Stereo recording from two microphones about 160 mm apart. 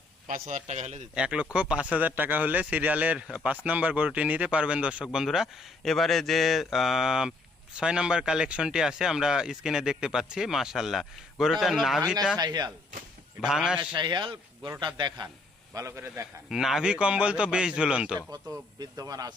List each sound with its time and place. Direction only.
0.3 s a man's voice: 50° right (ahead or behind)
1.1 s a man's voice: 5° right (ahead or behind)
12.4 s speech: 25° right (ahead or behind)
13.4 s speech: 5° right (ahead or behind)
13.7 s a man's voice: 30° right (ahead or behind)
16.5 s a man's voice: 5° right (ahead or behind)
18.3 s speech: 20° right (ahead or behind)